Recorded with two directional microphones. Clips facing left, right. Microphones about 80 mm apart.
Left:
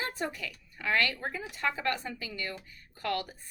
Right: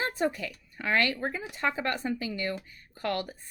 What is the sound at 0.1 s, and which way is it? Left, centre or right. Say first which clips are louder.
A woman's voice: right 6 dB; right.